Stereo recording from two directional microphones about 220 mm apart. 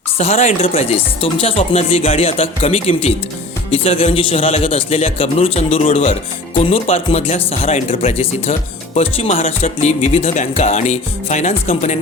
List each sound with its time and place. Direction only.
0.2 s speech: 30° left (ahead or behind)